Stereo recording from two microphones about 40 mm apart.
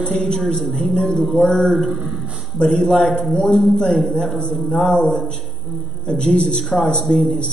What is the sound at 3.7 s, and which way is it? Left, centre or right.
Speech, centre.